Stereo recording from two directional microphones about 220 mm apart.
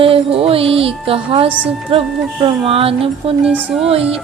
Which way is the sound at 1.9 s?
25° right (ahead or behind).